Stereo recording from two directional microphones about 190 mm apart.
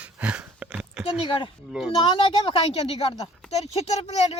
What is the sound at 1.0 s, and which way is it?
A woman's voice, 25° left (ahead or behind).